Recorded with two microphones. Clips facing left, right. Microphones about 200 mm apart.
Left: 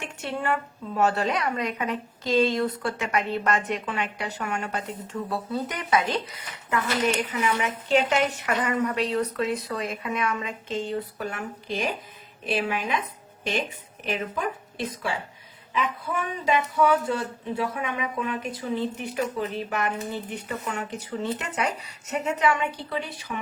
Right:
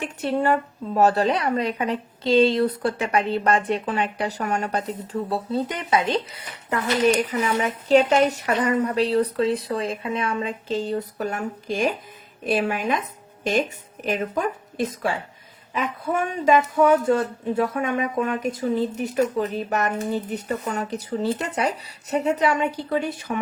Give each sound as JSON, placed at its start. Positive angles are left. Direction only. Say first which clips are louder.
{"t": 0.0, "sound": "a woman's voice", "louder": "right 7 dB", "side_deg": -35}